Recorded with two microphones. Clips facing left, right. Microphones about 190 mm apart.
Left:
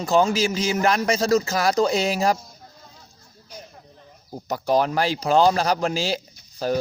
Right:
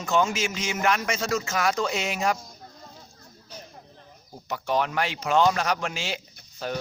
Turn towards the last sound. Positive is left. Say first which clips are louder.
# left 8 dB
turn(degrees=35)  # may be behind; listen again after turning